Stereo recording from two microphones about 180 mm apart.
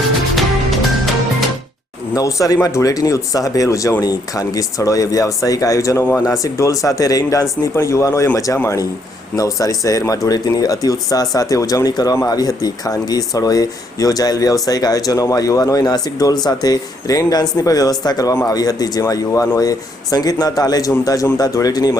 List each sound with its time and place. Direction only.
0.3 s music: centre (ahead or behind)
2.1 s speech: 20° left (ahead or behind)